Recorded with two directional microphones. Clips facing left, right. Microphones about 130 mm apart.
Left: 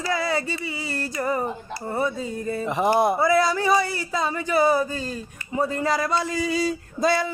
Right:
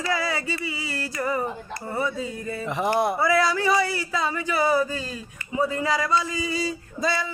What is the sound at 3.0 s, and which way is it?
Speech, 35° left (ahead or behind).